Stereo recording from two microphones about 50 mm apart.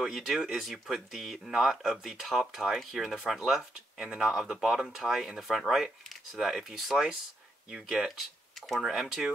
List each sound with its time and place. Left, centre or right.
0.0 s speech: centre
8.2 s speech: centre